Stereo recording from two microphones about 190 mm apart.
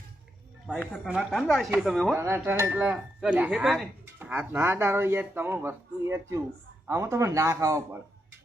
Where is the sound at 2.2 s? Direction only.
15° right (ahead or behind).